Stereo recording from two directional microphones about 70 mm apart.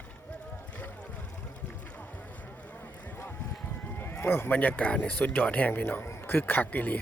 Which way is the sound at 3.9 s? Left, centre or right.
Left.